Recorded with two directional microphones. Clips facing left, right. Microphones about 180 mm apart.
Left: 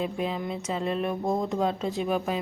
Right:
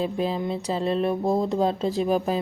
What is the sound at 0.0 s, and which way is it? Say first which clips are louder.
Speech: right 4 dB; 30° right (ahead or behind).